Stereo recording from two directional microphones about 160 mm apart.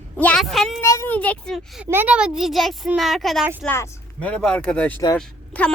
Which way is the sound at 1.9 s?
10° right (ahead or behind).